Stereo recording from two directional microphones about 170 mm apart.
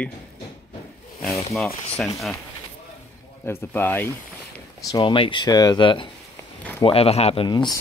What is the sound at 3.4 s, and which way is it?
Speech, 10° left (ahead or behind).